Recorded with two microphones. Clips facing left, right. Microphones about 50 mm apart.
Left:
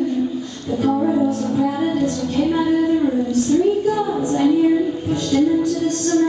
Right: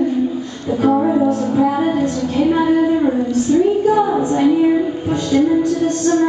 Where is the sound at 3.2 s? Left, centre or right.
Centre.